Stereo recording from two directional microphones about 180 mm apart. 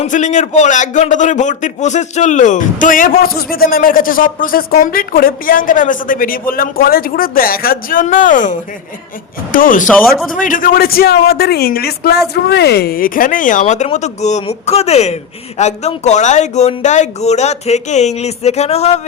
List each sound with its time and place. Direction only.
0.0 s a man's voice: 40° left (ahead or behind)